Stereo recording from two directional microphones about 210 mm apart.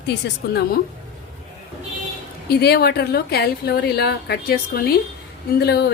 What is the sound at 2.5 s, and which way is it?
A woman's voice, 50° left (ahead or behind).